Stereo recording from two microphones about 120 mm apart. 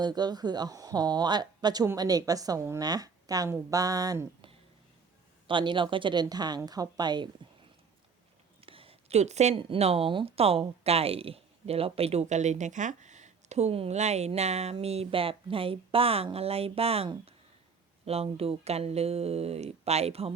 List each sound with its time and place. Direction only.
0.0 s a woman's voice: 35° right (ahead or behind)
5.5 s a woman's voice: 45° right (ahead or behind)
8.6 s a sound: 50° right (ahead or behind); by 9.6 s 70° right (ahead or behind)
9.6 s speech: 55° right (ahead or behind)